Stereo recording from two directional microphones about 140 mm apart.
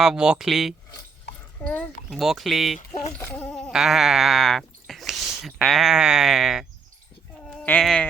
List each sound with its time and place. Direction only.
0.0 s speech: 5° right (ahead or behind)
2.7 s speech: 65° left (ahead or behind)
3.2 s speech: 15° left (ahead or behind)
7.4 s sheep: 10° left (ahead or behind)